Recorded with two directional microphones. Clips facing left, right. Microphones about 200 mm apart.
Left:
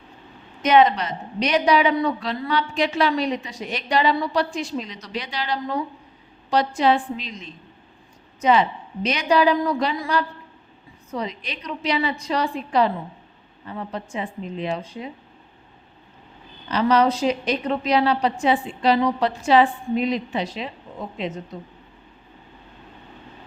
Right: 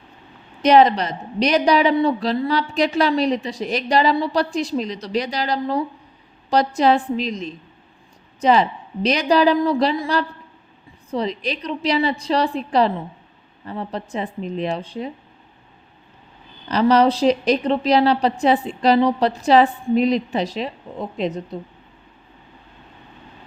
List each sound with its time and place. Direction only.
0.6 s a woman's voice: 35° right (ahead or behind)
16.6 s a woman's voice: 35° right (ahead or behind)